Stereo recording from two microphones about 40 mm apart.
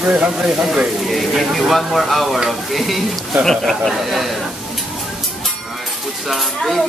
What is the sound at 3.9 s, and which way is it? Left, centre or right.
Speech, centre.